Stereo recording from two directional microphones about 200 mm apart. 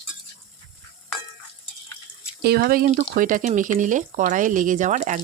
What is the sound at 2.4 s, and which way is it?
Speech, 50° right (ahead or behind).